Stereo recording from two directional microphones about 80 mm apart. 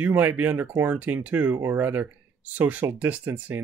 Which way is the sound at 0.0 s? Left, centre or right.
Centre.